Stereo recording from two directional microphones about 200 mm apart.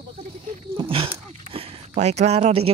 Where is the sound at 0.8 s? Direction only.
25° right (ahead or behind).